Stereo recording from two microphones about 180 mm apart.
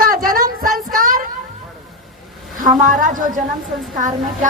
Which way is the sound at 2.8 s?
45° right (ahead or behind).